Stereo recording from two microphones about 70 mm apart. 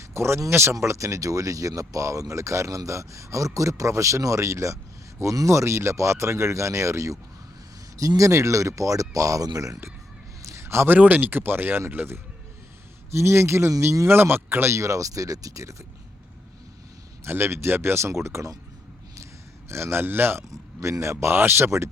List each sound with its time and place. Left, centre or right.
0.1 s speech: right
10.4 s a sound: right
10.9 s speech: right
17.2 s speech: right
19.1 s a sound: right
20.5 s speech: right